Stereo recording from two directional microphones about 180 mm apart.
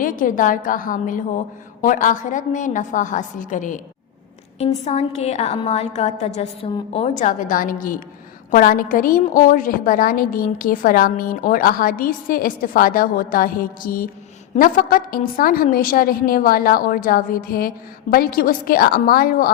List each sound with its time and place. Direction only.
0.0 s a woman's voice: 50° left (ahead or behind)